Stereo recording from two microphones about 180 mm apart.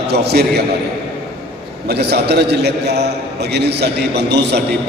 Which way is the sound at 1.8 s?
65° right (ahead or behind).